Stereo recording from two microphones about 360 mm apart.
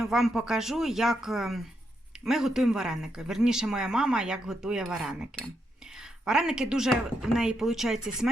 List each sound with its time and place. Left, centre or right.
0.0 s speech: centre